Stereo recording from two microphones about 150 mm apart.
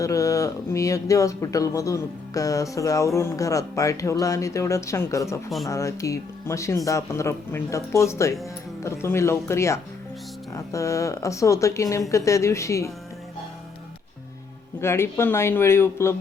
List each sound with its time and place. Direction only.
0.0 s speech: 20° left (ahead or behind)
14.8 s speech: 15° left (ahead or behind)